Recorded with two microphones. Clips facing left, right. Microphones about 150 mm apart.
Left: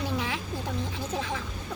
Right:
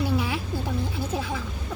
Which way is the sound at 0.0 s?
10° right (ahead or behind).